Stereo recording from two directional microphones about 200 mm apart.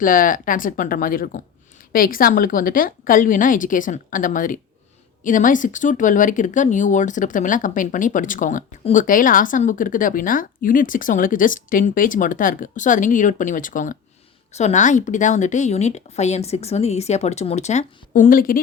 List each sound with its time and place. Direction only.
0.0 s a woman's voice: 45° left (ahead or behind)